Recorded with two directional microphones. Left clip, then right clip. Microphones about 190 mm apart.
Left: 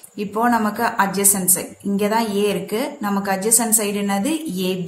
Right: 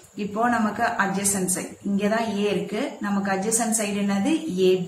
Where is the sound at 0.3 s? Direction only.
55° left (ahead or behind).